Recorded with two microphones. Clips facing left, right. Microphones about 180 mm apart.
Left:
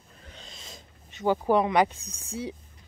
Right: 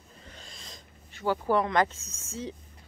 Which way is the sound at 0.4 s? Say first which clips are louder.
Left 3 dB; centre (ahead or behind).